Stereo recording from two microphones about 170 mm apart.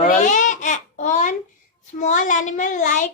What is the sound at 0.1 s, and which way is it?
Babbling, 45° left (ahead or behind).